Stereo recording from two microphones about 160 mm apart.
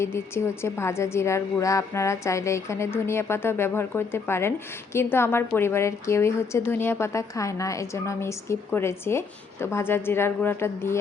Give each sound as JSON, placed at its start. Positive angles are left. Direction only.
{"t": 0.0, "sound": "a woman's voice", "side_deg": 15}